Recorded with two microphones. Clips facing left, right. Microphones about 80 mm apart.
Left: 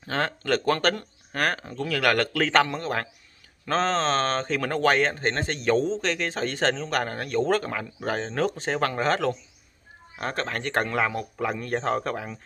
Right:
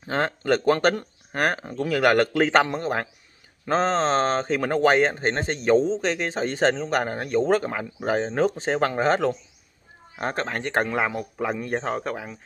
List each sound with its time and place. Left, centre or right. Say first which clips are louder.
0.0 s speech: right 3 dB; centre
5.8 s a man's voice: right 3 dB; centre
6.1 s a man's voice: right 2 dB; right; by 12.4 s centre